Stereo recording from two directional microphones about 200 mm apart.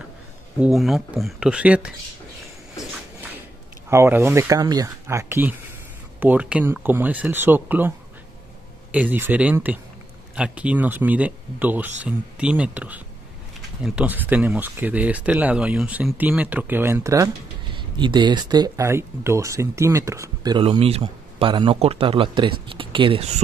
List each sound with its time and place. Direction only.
0.6 s speech: centre (ahead or behind)
3.9 s speech: 10° right (ahead or behind)
8.9 s speech: 10° right (ahead or behind); by 23.3 s 25° right (ahead or behind)